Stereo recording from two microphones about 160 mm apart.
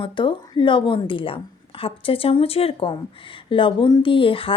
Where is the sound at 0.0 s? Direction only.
30° left (ahead or behind).